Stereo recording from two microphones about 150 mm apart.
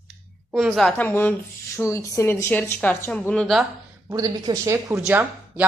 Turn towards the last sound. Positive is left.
turn(degrees=-10)  # may be behind; listen again after turning